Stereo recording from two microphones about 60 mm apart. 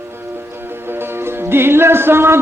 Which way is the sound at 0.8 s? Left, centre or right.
Right.